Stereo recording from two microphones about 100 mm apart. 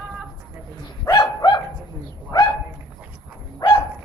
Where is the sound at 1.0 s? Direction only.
40° left (ahead or behind).